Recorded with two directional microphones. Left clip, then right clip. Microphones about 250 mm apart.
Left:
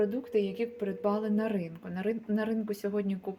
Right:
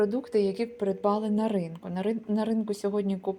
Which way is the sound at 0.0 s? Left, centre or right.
Centre.